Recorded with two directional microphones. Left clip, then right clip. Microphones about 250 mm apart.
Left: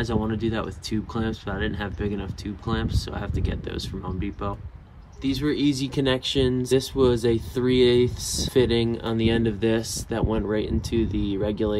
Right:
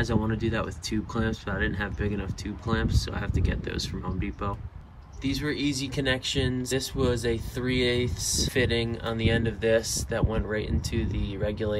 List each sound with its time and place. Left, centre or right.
0.0 s speech: centre